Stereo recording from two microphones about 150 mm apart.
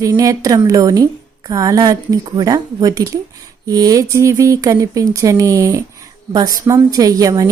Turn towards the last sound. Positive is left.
turn(degrees=-25)  # may be behind; listen again after turning